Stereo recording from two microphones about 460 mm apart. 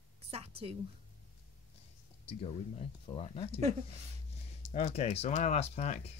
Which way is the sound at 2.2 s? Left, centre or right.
Centre.